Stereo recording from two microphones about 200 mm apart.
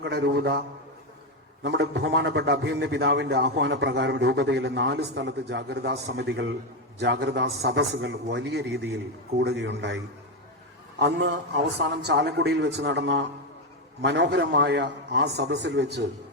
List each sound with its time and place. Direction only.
0.0 s a man's voice: 55° right (ahead or behind)
1.6 s a man's voice: 60° right (ahead or behind)
11.0 s a man's voice: 60° right (ahead or behind)